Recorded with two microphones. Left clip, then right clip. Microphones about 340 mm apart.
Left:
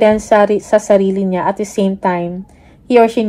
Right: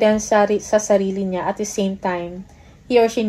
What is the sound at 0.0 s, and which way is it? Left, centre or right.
Speech, left.